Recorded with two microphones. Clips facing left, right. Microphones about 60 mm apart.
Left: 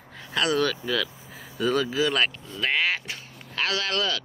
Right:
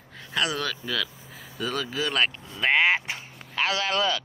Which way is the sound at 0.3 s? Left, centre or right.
Centre.